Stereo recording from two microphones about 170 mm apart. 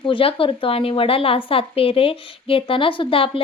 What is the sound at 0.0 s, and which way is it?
A woman's voice, 30° left (ahead or behind).